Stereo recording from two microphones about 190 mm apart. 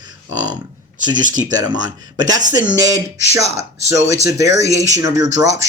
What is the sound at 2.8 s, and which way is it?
Speech, 20° right (ahead or behind).